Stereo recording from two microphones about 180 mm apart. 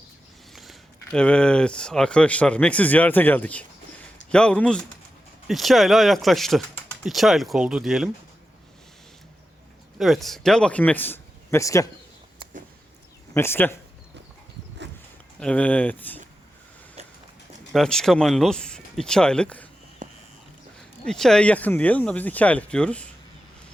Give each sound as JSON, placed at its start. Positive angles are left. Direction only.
{"t": 0.5, "sound": "speech", "side_deg": 0}
{"t": 10.0, "sound": "speech", "side_deg": 0}
{"t": 13.3, "sound": "speech", "side_deg": 15}
{"t": 15.4, "sound": "speech", "side_deg": 5}
{"t": 17.7, "sound": "speech", "side_deg": 5}
{"t": 20.0, "sound": "a sound", "side_deg": -45}
{"t": 21.0, "sound": "speech", "side_deg": 5}